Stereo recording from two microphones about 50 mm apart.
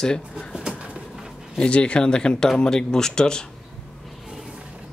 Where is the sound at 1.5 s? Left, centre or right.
Left.